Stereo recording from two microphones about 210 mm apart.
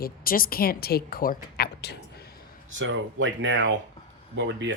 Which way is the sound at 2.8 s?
65° right (ahead or behind).